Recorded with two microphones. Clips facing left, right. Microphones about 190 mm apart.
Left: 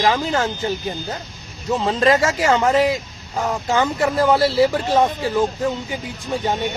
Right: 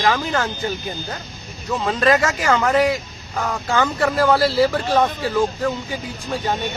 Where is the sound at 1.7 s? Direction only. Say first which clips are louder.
Left 1 dB; 25° left (ahead or behind).